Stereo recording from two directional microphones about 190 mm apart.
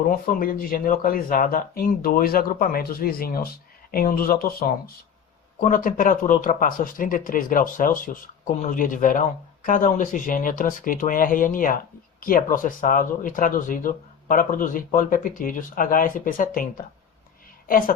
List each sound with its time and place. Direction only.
0.0 s a woman's voice: 50° left (ahead or behind)